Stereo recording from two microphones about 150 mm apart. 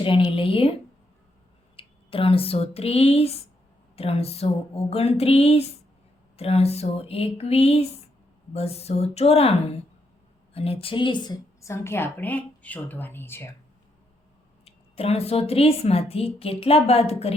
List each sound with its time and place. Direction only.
0.0 s a woman's voice: 35° left (ahead or behind)
6.3 s a sound: 40° left (ahead or behind)
10.5 s a woman's voice: 40° left (ahead or behind); by 13.5 s 15° left (ahead or behind)
14.6 s a woman's voice: 40° left (ahead or behind)